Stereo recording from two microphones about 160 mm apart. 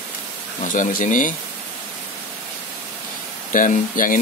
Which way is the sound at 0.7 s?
55° left (ahead or behind).